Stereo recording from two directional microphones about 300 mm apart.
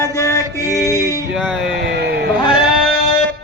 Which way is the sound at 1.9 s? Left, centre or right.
Right.